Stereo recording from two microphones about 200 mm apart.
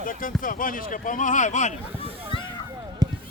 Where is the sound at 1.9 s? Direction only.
30° right (ahead or behind).